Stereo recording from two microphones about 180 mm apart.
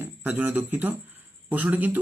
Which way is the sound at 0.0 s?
10° right (ahead or behind).